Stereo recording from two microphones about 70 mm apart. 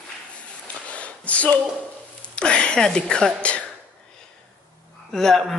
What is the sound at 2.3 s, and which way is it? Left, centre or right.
Speech, centre.